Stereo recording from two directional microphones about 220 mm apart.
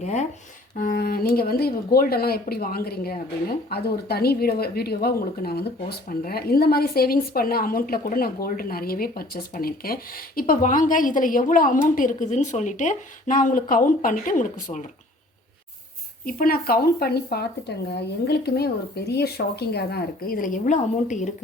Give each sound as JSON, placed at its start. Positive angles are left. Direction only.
{"t": 0.0, "sound": "speech", "side_deg": 30}
{"t": 0.8, "sound": "speech", "side_deg": 40}
{"t": 16.2, "sound": "speech", "side_deg": 40}